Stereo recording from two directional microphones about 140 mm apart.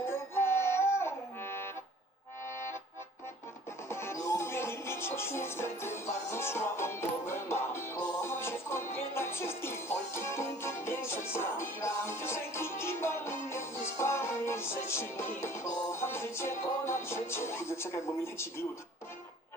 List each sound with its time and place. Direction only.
0.0 s music: 15° left (ahead or behind)
3.8 s music: 20° left (ahead or behind)